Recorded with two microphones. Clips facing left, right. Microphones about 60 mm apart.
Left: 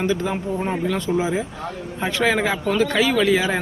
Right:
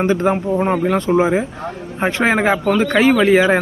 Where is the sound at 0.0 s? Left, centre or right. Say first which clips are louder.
Right 6 dB; right.